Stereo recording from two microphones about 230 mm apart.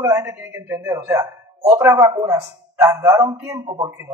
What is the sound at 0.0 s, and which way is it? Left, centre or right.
A man's voice, centre.